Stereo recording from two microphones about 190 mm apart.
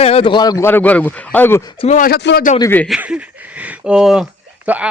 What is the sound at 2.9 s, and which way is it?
Speech, 5° right (ahead or behind).